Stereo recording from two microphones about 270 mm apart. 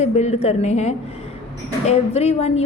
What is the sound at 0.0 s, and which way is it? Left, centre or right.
A woman's voice, left.